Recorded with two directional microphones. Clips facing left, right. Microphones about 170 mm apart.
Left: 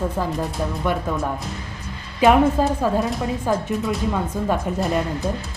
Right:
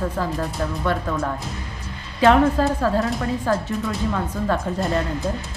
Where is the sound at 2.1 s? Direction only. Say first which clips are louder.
Even; 15° left (ahead or behind).